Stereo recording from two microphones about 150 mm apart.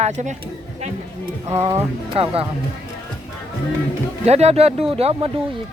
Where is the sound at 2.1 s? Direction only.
40° right (ahead or behind).